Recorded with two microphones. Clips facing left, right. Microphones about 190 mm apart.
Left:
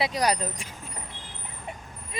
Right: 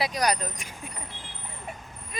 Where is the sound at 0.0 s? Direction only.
25° left (ahead or behind).